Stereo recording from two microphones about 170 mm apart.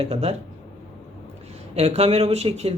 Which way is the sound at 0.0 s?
35° right (ahead or behind).